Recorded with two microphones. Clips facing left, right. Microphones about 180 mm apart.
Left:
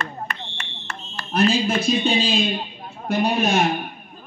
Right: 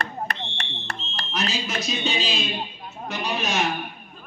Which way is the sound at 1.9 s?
55° left (ahead or behind).